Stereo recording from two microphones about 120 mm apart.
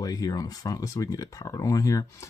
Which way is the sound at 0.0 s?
30° left (ahead or behind).